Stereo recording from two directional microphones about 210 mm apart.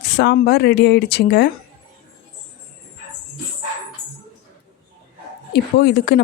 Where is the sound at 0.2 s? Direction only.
50° left (ahead or behind).